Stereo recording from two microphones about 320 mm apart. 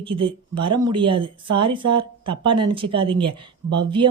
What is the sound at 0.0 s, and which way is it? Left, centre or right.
Speech, centre.